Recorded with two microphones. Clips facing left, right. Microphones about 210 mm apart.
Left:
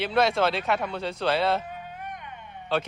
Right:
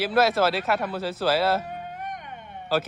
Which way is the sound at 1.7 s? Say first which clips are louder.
Right 3 dB; 50° right (ahead or behind).